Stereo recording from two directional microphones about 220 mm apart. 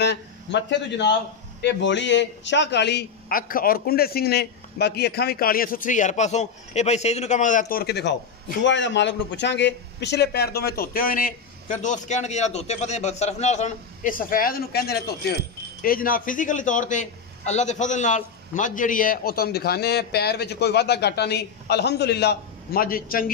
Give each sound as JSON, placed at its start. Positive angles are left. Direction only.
{"t": 0.0, "sound": "a man's voice", "side_deg": 50}